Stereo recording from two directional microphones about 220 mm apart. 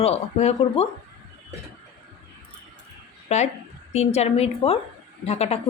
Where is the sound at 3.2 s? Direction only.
30° left (ahead or behind).